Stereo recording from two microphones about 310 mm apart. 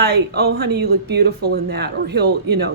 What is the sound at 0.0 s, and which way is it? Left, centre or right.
Speech, right.